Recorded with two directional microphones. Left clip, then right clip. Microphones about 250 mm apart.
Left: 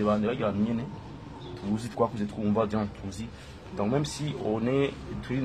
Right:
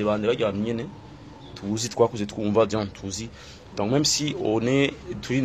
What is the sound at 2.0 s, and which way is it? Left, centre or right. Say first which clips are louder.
Speech: right 6 dB; right.